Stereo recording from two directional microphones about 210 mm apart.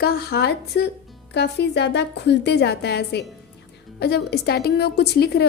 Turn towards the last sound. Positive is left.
turn(degrees=50)  # may be behind; listen again after turning